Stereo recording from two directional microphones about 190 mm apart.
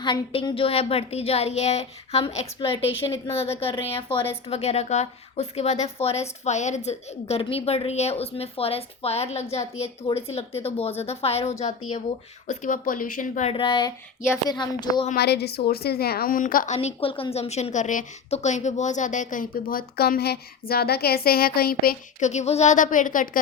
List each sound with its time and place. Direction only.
0.0 s a woman's voice: 25° left (ahead or behind)
12.5 s a woman's voice: 45° left (ahead or behind)
13.5 s a woman's voice: 25° left (ahead or behind)
15.1 s a woman's voice: 60° left (ahead or behind)
22.3 s a woman's voice: 35° left (ahead or behind)